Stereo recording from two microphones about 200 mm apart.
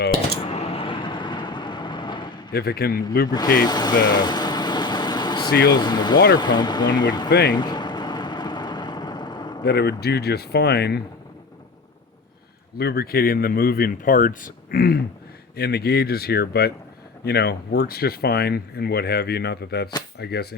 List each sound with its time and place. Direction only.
0.1 s a sound: 25° left (ahead or behind)
2.5 s speech: 50° left (ahead or behind)
3.2 s speech: 20° left (ahead or behind)
3.6 s vehicle: 20° left (ahead or behind)
5.6 s speech: 20° left (ahead or behind)
7.3 s speech: 55° left (ahead or behind)
7.5 s vehicle: 20° left (ahead or behind)
9.6 s speech: 55° left (ahead or behind)
12.7 s speech: 50° left (ahead or behind)